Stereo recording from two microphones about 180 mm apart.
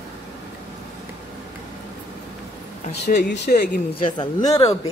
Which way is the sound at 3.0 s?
70° left (ahead or behind).